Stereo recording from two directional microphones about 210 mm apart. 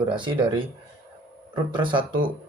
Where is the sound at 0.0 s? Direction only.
20° right (ahead or behind).